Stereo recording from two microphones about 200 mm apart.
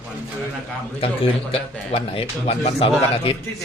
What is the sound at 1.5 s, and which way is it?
A man's voice, 30° left (ahead or behind).